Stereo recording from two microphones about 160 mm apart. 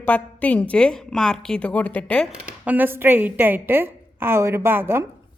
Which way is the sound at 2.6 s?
10° right (ahead or behind).